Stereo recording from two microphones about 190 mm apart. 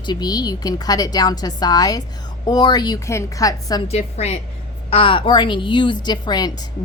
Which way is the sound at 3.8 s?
35° left (ahead or behind).